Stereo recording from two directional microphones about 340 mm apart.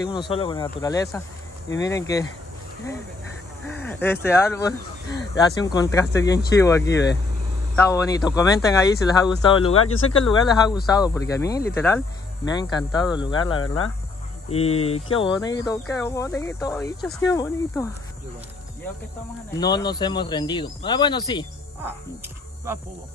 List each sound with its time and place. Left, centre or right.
0.3 s speech: centre
3.8 s speech: centre
9.8 s speech: left
10.2 s speech: centre
19.5 s speech: centre